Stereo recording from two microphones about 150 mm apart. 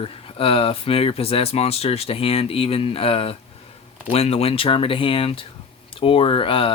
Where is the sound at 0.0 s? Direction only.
40° left (ahead or behind).